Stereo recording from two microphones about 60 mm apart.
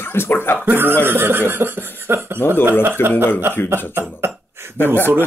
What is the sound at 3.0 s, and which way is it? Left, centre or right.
Speech, left.